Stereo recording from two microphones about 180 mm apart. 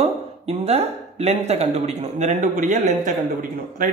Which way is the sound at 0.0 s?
35° right (ahead or behind).